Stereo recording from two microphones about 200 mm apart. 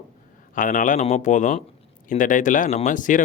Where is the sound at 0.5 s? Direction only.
40° left (ahead or behind).